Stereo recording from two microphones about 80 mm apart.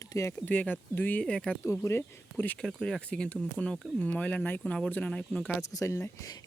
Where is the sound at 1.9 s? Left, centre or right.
Left.